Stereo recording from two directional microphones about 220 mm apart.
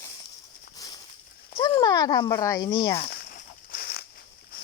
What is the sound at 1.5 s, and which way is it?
Speech, 25° left (ahead or behind).